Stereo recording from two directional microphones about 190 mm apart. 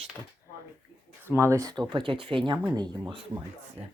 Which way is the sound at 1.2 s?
15° right (ahead or behind).